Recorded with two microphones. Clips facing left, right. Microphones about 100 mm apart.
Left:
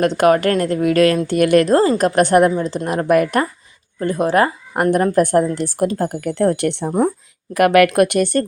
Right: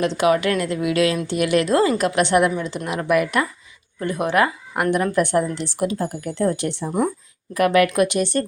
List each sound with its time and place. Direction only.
0.0 s a woman's voice: 50° left (ahead or behind)
6.1 s speech: 60° left (ahead or behind)
6.8 s a woman's voice: 40° left (ahead or behind)
7.5 s speech: 70° left (ahead or behind); by 8.4 s 50° left (ahead or behind)